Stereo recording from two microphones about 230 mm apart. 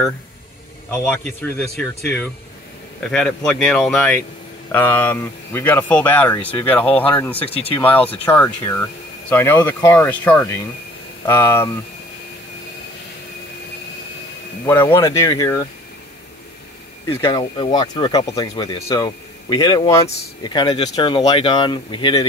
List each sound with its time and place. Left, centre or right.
1.2 s speech: centre
7.4 s speech: left
7.8 s speech: centre
14.9 s speech: centre
17.0 s speech: centre